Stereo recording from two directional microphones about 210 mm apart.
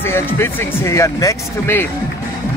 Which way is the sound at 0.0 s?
10° left (ahead or behind).